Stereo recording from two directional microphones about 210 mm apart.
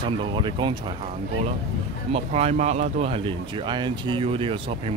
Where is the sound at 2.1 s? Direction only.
30° right (ahead or behind).